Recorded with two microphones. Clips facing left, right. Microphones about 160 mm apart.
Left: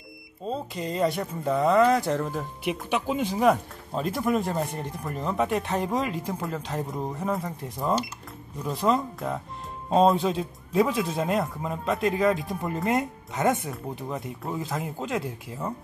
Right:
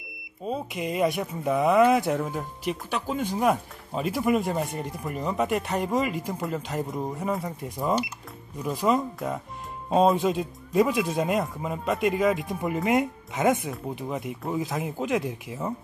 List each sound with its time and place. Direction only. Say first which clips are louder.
0.5 s speech: right 1 dB; 10° right (ahead or behind)
2.6 s speech: left 3 dB; 10° left (ahead or behind)
3.3 s speech: left 3 dB; 5° right (ahead or behind)